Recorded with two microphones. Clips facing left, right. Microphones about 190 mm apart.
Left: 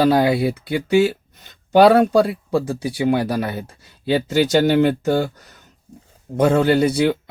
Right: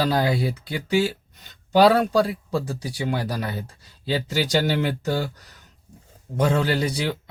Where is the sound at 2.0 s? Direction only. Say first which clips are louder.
Left 5 dB; 25° left (ahead or behind).